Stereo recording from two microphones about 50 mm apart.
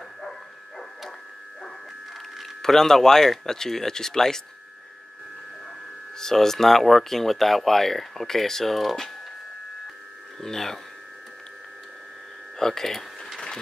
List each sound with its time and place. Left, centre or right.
2.6 s speech: centre
6.1 s speech: centre
10.4 s speech: centre
12.5 s a sound: centre